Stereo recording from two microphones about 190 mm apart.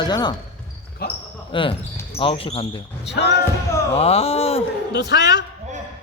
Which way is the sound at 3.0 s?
65° left (ahead or behind).